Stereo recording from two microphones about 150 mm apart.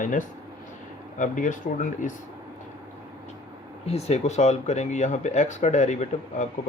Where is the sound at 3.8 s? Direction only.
45° left (ahead or behind).